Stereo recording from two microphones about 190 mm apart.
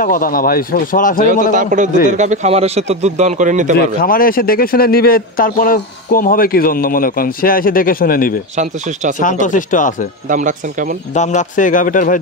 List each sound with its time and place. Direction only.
0.0 s speech: 50° left (ahead or behind)
1.5 s a man's voice: 45° right (ahead or behind)
3.7 s speech: 50° left (ahead or behind)
10.2 s speech: 45° right (ahead or behind)
11.1 s speech: 40° left (ahead or behind)